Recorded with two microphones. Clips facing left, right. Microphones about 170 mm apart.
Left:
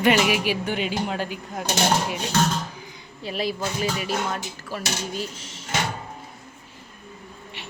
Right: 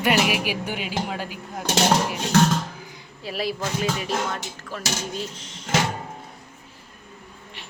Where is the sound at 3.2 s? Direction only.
Centre (ahead or behind).